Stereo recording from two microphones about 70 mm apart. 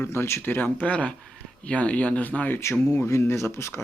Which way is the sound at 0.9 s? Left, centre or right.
Centre.